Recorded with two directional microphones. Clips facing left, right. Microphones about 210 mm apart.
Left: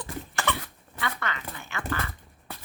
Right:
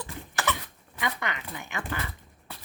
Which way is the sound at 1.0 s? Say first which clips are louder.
Right 1 dB; 15° right (ahead or behind).